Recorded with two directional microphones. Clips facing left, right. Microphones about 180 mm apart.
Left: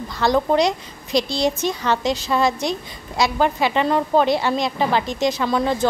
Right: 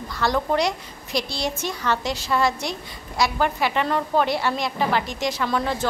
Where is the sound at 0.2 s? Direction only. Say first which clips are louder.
Left 4 dB; 20° left (ahead or behind).